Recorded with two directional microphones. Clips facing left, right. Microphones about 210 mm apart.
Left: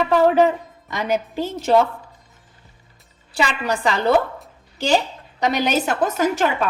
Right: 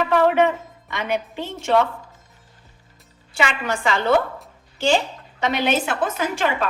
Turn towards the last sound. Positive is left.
turn(degrees=40)  # may be behind; listen again after turning